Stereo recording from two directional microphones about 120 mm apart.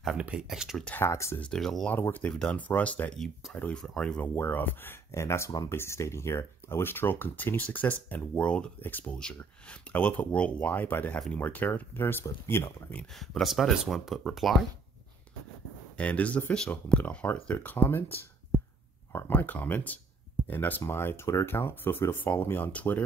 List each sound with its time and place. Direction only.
0.2 s speech: 10° right (ahead or behind)
0.8 s speech: 20° left (ahead or behind)
1.4 s speech: 5° left (ahead or behind)
1.9 s speech: 15° left (ahead or behind)
13.1 s speech: centre (ahead or behind)
16.0 s speech: 10° left (ahead or behind)
19.1 s speech: 15° left (ahead or behind)